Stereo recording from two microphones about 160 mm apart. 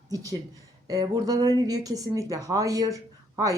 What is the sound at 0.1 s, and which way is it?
Speech, 20° right (ahead or behind).